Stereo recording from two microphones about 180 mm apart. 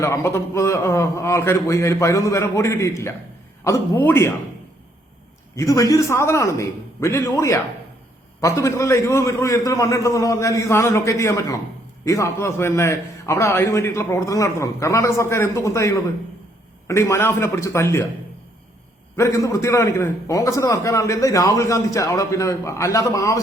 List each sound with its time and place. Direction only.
0.0 s a man's voice: 15° left (ahead or behind)
5.5 s a man's voice: 15° left (ahead or behind)
19.1 s a man's voice: 15° left (ahead or behind)